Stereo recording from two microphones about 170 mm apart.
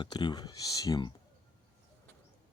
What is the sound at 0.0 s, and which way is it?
Speech, 25° left (ahead or behind).